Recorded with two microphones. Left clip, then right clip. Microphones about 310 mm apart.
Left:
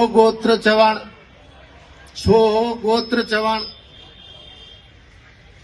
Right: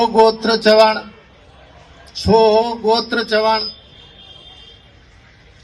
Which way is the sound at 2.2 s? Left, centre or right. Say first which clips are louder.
Right 3 dB; right.